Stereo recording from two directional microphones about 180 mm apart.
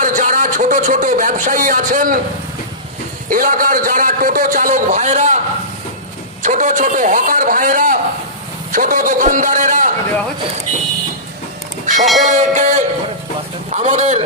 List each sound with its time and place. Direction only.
0.0 s speech: 45° right (ahead or behind)
3.3 s a man's voice: 50° right (ahead or behind)
6.4 s a man's voice: 45° right (ahead or behind)
11.8 s music: 45° right (ahead or behind)